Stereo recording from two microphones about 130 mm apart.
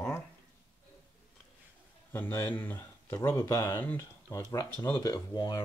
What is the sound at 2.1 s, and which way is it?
Speech, 15° left (ahead or behind).